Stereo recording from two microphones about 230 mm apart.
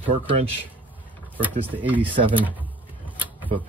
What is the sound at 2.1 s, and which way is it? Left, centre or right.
Speech, right.